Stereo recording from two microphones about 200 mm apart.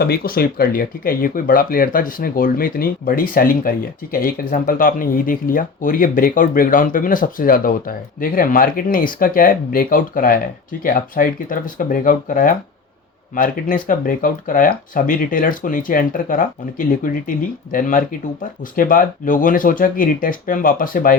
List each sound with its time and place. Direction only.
0.0 s speech: 50° left (ahead or behind)